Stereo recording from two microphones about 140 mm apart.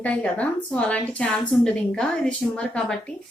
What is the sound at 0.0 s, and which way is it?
A woman's voice, 10° left (ahead or behind).